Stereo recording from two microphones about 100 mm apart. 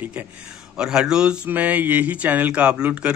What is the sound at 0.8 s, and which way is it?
Speech, 5° right (ahead or behind).